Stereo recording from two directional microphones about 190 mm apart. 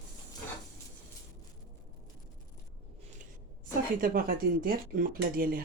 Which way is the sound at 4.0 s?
50° right (ahead or behind).